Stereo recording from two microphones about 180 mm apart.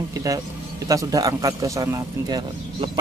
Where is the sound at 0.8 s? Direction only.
20° right (ahead or behind).